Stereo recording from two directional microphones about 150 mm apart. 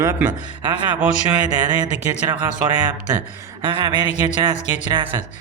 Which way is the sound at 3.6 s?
30° right (ahead or behind).